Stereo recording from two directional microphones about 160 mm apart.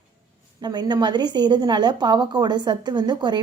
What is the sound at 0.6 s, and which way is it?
A woman's voice, 25° right (ahead or behind).